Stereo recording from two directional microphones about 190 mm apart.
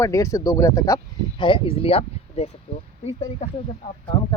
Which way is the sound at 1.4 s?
30° left (ahead or behind).